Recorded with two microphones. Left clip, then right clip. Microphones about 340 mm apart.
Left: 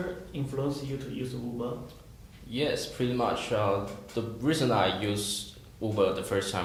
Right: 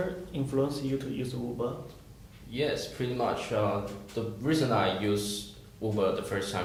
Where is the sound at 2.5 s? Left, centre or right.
Left.